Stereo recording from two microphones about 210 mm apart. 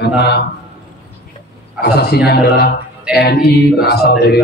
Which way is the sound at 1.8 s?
50° left (ahead or behind).